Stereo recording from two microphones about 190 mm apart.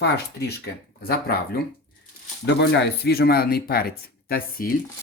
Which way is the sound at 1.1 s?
55° left (ahead or behind).